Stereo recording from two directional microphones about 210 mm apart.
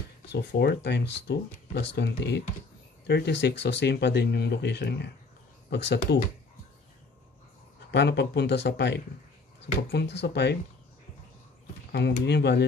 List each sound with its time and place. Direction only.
0.3 s speech: 55° left (ahead or behind)
7.9 s speech: 55° left (ahead or behind)
11.9 s speech: 50° left (ahead or behind)